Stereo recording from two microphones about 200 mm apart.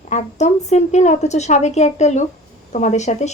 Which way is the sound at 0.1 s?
35° left (ahead or behind).